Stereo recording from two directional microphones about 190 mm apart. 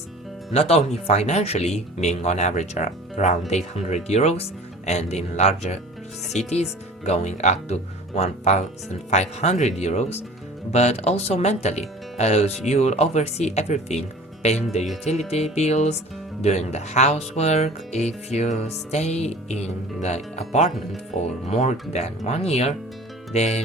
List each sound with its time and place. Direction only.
0.5 s speech: 30° left (ahead or behind)